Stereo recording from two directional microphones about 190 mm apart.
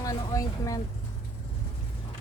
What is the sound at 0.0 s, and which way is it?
Vehicle, 15° left (ahead or behind).